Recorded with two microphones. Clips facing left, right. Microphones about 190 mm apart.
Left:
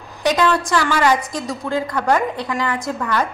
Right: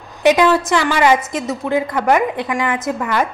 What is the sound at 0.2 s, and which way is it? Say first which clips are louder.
A woman's voice: right 5 dB; 20° right (ahead or behind).